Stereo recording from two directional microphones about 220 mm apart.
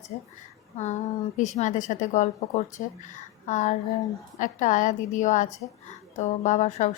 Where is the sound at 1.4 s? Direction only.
35° left (ahead or behind).